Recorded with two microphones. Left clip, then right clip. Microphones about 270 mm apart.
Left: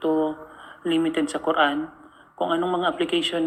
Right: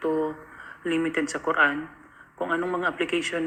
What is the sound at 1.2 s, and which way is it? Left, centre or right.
Speech, left.